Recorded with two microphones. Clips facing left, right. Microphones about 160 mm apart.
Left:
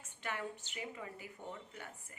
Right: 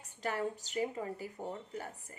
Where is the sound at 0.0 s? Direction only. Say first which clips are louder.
Right 7 dB; 40° right (ahead or behind).